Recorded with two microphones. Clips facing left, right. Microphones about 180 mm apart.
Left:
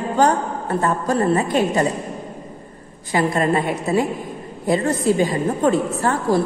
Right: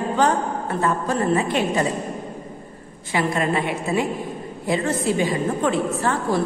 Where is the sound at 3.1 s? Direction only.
40° left (ahead or behind).